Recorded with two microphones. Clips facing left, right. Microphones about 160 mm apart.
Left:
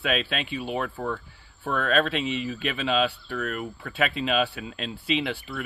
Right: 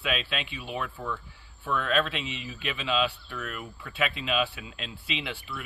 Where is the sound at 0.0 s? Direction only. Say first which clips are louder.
Left 4 dB; 40° left (ahead or behind).